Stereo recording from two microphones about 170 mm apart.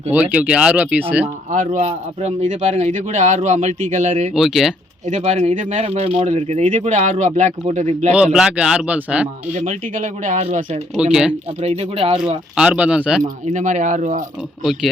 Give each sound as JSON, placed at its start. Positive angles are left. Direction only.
{"t": 0.1, "sound": "speech", "side_deg": -10}
{"t": 1.5, "sound": "speech", "side_deg": -50}
{"t": 4.4, "sound": "speech", "side_deg": 0}
{"t": 5.0, "sound": "speech", "side_deg": -45}
{"t": 8.1, "sound": "speech", "side_deg": -5}
{"t": 9.5, "sound": "speech", "side_deg": -40}
{"t": 10.9, "sound": "speech", "side_deg": -5}
{"t": 11.6, "sound": "speech", "side_deg": -40}
{"t": 12.5, "sound": "speech", "side_deg": -5}
{"t": 13.5, "sound": "speech", "side_deg": -45}
{"t": 14.6, "sound": "speech", "side_deg": 0}